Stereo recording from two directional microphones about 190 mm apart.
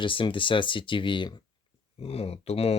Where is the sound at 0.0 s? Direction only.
25° left (ahead or behind).